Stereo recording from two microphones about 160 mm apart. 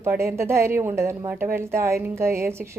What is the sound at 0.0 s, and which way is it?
Speech, 15° right (ahead or behind).